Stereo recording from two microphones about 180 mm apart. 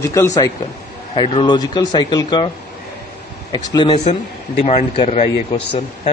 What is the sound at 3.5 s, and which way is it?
Speech, 25° left (ahead or behind).